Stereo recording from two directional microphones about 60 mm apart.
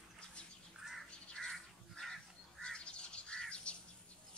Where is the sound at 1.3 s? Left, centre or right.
Centre.